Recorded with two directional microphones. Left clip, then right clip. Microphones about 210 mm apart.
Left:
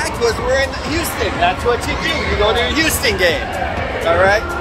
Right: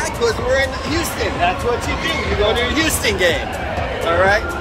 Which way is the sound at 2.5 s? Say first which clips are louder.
Left 2 dB; 5° right (ahead or behind).